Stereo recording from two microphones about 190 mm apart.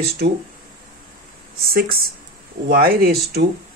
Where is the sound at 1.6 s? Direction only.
50° right (ahead or behind).